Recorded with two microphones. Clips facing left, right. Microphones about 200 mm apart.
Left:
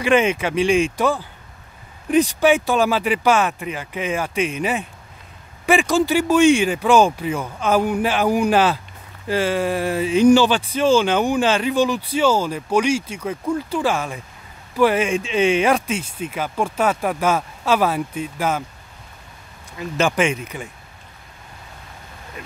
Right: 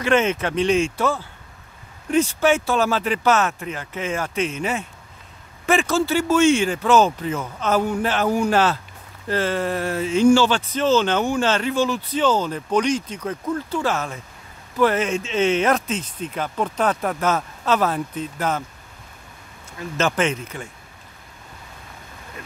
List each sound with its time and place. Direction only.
0.0 s speech: 15° left (ahead or behind)
19.8 s speech: 10° left (ahead or behind)